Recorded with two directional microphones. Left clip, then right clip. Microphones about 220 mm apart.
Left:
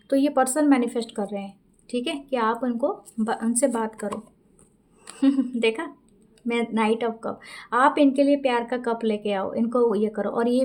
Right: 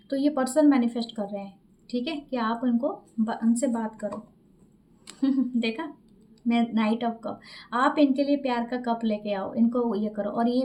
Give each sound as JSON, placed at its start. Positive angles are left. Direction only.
{"t": 0.1, "sound": "a woman's voice", "side_deg": 50}
{"t": 5.1, "sound": "a woman's voice", "side_deg": 50}